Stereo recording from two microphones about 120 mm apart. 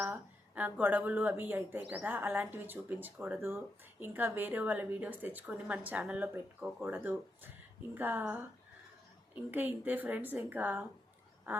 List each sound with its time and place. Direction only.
0.0 s a woman's voice: 15° right (ahead or behind)
11.5 s duck: 20° right (ahead or behind)